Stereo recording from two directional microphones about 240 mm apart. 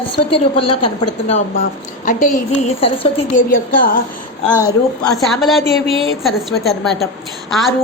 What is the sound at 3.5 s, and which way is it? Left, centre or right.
Speech, left.